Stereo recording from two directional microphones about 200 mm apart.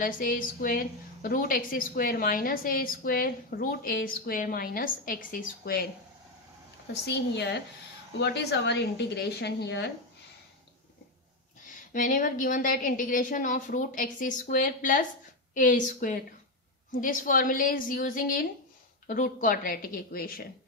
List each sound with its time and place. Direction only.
0.0 s a woman's voice: 45° left (ahead or behind)
6.9 s a woman's voice: 55° left (ahead or behind)
11.9 s a woman's voice: 40° left (ahead or behind)